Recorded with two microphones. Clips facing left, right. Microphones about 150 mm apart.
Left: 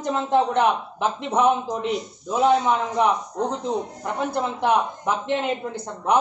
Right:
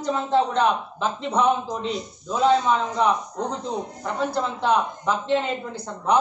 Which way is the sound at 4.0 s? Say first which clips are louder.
Even; 15° left (ahead or behind).